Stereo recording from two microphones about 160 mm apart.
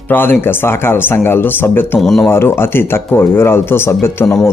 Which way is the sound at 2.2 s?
15° left (ahead or behind).